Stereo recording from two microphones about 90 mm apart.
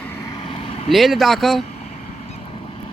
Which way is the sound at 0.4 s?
90° left.